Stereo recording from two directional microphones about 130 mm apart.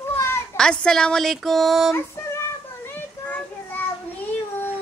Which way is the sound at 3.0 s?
15° left (ahead or behind).